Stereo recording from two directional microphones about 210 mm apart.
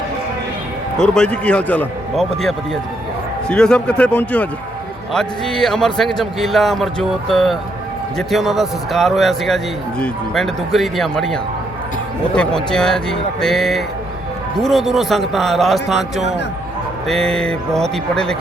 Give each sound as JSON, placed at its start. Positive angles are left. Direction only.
{"t": 0.9, "sound": "speech", "side_deg": 5}